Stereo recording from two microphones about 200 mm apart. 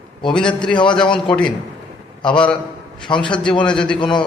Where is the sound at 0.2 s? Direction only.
25° left (ahead or behind).